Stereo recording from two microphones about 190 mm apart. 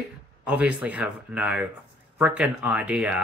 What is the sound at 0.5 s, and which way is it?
Speech, 5° right (ahead or behind).